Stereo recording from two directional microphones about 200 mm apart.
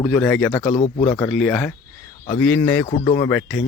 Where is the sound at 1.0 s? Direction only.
5° left (ahead or behind).